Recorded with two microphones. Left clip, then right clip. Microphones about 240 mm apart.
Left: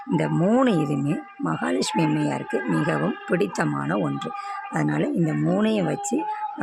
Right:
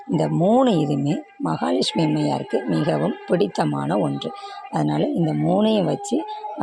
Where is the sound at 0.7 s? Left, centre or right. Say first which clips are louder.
Right 3 dB; centre.